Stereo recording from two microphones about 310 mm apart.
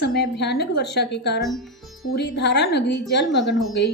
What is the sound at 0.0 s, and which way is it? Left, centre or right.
Speech, left.